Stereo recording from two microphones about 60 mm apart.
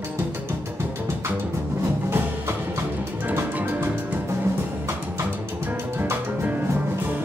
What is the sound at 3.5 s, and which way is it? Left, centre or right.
Music, right.